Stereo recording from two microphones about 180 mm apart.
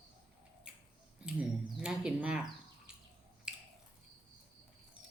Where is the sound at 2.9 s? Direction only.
5° right (ahead or behind).